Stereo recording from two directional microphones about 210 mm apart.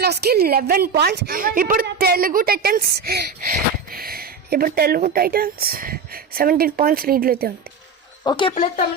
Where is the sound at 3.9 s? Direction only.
45° right (ahead or behind).